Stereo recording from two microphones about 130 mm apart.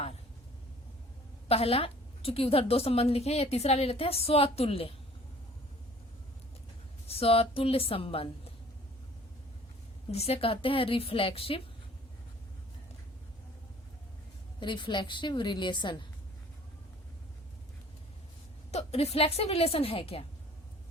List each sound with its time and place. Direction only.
1.5 s a woman's voice: 50° left (ahead or behind)
7.1 s a woman's voice: 50° left (ahead or behind)
10.1 s a woman's voice: 50° left (ahead or behind)
14.6 s a woman's voice: 35° left (ahead or behind)
18.7 s a woman's voice: 55° left (ahead or behind)